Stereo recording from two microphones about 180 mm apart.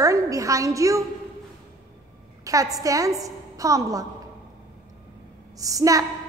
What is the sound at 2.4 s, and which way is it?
A woman's voice, 20° right (ahead or behind).